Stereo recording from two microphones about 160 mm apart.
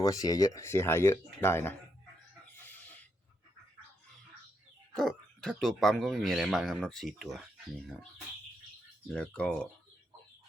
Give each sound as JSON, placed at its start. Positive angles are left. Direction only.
{"t": 0.0, "sound": "speech", "side_deg": 20}
{"t": 2.6, "sound": "a sound", "side_deg": 10}
{"t": 4.9, "sound": "speech", "side_deg": 0}
{"t": 9.0, "sound": "speech", "side_deg": 5}